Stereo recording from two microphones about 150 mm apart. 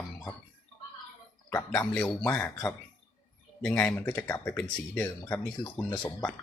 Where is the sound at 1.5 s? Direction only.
20° left (ahead or behind).